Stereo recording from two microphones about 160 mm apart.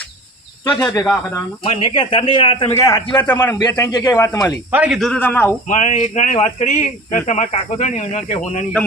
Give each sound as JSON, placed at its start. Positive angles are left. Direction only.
{"t": 0.8, "sound": "speech", "side_deg": 15}
{"t": 1.6, "sound": "a man's voice", "side_deg": 35}
{"t": 2.7, "sound": "a man's voice", "side_deg": 20}
{"t": 4.7, "sound": "a man's voice", "side_deg": -10}
{"t": 4.9, "sound": "a man's voice", "side_deg": 5}
{"t": 5.6, "sound": "speech", "side_deg": 50}